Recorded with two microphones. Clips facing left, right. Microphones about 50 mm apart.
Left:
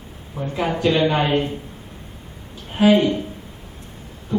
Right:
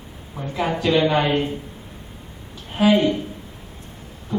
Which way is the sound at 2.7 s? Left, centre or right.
Left.